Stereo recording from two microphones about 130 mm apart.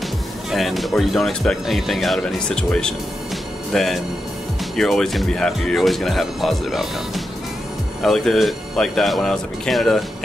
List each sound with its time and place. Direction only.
0.5 s speech: centre (ahead or behind)